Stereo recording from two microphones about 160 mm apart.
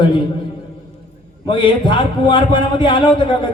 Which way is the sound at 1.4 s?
30° left (ahead or behind).